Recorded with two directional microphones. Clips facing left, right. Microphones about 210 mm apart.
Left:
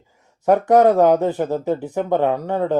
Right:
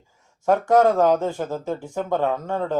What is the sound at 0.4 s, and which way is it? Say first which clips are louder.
Speech: left 4 dB; 20° left (ahead or behind).